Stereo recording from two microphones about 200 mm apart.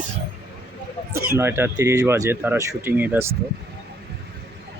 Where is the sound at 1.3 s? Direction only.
15° right (ahead or behind).